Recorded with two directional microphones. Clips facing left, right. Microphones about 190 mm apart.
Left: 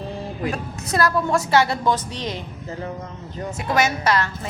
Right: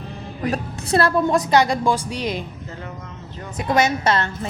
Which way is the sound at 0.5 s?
30° right (ahead or behind).